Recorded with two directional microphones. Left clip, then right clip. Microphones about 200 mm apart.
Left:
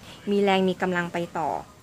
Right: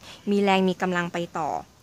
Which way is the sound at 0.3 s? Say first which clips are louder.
Even; 35° right (ahead or behind).